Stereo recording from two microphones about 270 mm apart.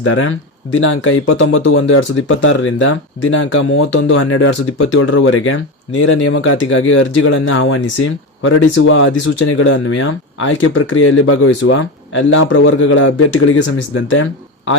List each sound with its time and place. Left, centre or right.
0.0 s speech: left